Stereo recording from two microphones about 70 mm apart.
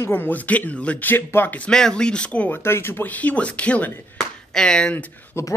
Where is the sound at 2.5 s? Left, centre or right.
Left.